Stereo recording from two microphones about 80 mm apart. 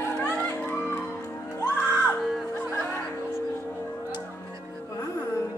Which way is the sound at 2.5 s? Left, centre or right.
Centre.